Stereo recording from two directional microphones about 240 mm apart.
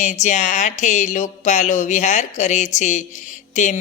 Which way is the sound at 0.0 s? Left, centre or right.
Left.